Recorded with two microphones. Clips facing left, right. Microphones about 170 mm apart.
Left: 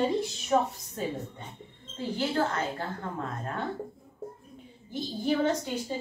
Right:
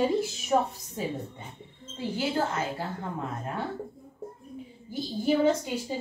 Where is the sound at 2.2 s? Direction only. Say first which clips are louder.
Even; 10° right (ahead or behind).